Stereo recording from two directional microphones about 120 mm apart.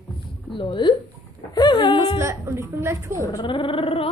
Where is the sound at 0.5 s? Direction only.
40° left (ahead or behind).